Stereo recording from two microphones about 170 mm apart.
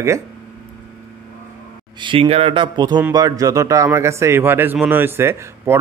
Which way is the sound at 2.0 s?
30° right (ahead or behind).